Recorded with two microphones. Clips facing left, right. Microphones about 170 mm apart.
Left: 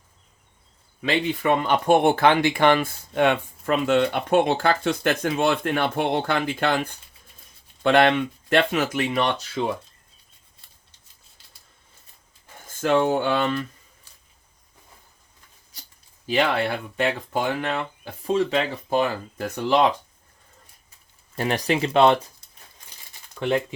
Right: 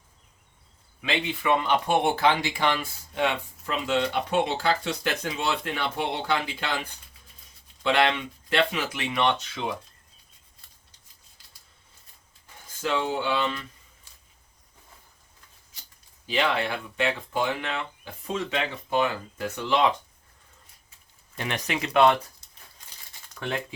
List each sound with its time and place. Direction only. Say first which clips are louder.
1.0 s speech: left 4 dB; 40° left (ahead or behind)
12.6 s speech: left 7 dB; 50° left (ahead or behind)
16.2 s speech: left 4 dB; 45° left (ahead or behind)
21.3 s speech: left 7 dB; 35° left (ahead or behind)